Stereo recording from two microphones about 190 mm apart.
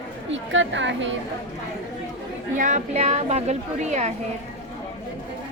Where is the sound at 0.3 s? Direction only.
75° right (ahead or behind).